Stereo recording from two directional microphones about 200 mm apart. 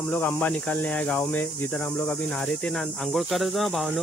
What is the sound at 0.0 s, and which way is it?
Speech, 10° left (ahead or behind).